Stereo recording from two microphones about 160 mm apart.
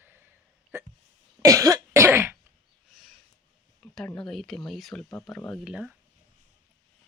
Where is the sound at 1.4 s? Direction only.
20° right (ahead or behind).